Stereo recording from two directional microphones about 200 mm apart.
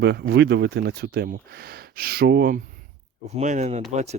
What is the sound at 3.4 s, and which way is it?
Speech, 35° right (ahead or behind).